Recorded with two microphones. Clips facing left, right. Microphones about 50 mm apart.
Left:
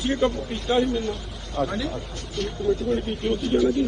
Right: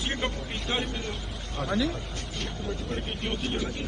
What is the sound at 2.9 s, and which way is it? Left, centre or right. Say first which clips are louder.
Speech: left 8 dB; right.